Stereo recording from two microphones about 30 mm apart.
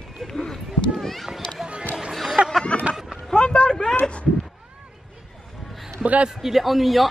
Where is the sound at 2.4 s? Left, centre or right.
Right.